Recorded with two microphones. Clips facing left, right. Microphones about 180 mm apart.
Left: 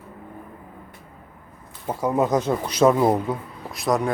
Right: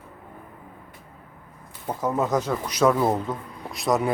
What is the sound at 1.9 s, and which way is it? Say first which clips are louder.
Speech: left 3 dB; 10° left (ahead or behind).